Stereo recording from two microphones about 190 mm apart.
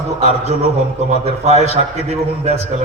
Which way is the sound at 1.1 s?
35° right (ahead or behind).